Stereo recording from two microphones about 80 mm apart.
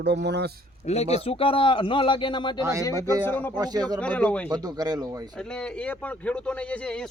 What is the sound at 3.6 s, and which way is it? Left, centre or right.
Speech, right.